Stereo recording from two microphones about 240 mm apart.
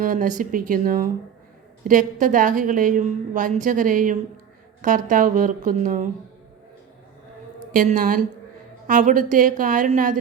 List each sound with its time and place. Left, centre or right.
0.0 s a woman's voice: right
7.7 s a woman's voice: right